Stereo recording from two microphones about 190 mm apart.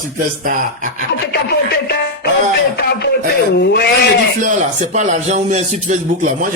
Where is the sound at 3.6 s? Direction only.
60° left (ahead or behind).